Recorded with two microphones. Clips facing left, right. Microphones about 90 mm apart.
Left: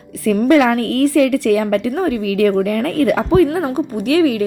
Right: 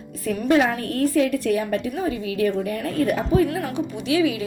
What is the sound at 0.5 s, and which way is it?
A woman's voice, 85° left.